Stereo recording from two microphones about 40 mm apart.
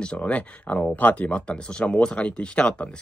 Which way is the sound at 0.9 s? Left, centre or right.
Left.